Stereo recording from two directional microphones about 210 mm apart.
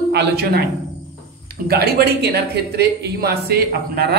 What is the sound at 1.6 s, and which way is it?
A man's voice, 50° right (ahead or behind).